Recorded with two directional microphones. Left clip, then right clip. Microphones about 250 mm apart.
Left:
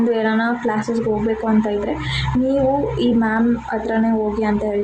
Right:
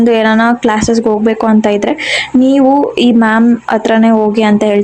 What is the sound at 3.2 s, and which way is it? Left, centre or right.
Speech, right.